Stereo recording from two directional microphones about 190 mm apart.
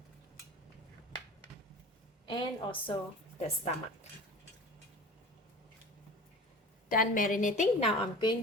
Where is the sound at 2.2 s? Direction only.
25° left (ahead or behind).